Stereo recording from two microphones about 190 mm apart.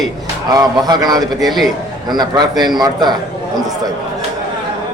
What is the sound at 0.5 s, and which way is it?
Speech, 20° right (ahead or behind).